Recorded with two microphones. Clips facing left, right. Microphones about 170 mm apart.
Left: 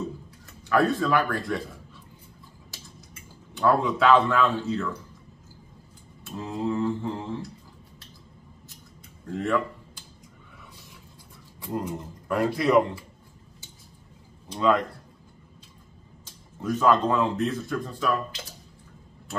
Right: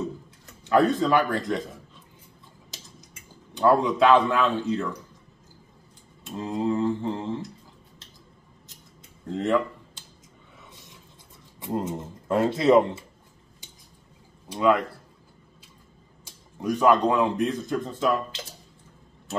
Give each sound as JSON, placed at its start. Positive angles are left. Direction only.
{"t": 0.7, "sound": "speech", "side_deg": -20}
{"t": 2.7, "sound": "tick-tock", "side_deg": -20}
{"t": 3.5, "sound": "speech", "side_deg": -15}
{"t": 6.2, "sound": "speech", "side_deg": -15}
{"t": 9.3, "sound": "speech", "side_deg": -20}
{"t": 11.6, "sound": "speech", "side_deg": -25}
{"t": 14.5, "sound": "speech", "side_deg": -10}
{"t": 16.3, "sound": "speech", "side_deg": -15}